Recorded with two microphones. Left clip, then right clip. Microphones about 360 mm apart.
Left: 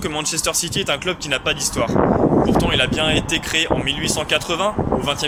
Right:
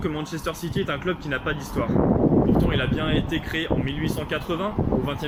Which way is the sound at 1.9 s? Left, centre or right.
Left.